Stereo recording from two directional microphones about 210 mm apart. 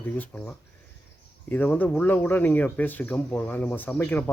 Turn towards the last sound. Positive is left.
turn(degrees=10)  # may be behind; listen again after turning